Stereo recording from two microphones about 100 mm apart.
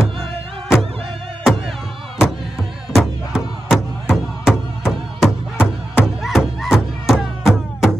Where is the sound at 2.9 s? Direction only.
5° right (ahead or behind).